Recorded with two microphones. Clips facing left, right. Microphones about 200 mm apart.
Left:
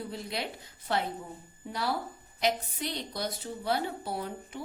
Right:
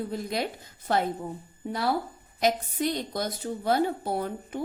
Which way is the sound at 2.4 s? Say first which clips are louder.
Right 5 dB; 45° right (ahead or behind).